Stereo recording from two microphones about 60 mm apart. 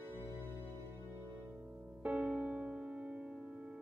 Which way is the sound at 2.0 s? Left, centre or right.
Right.